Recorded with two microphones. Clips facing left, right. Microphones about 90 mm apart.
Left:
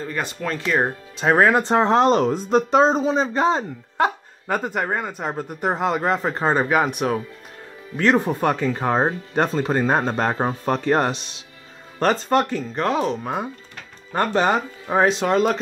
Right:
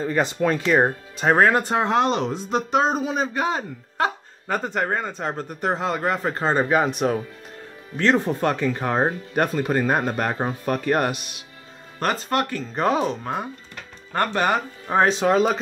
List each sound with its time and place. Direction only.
0.0 s speech: 20° right (ahead or behind)
1.4 s speech: 20° left (ahead or behind)
12.7 s speech: 5° right (ahead or behind)
13.2 s speech: 15° left (ahead or behind)
14.9 s speech: 5° left (ahead or behind)